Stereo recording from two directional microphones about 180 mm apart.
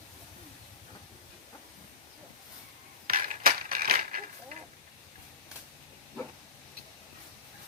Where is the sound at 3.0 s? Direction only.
55° right (ahead or behind).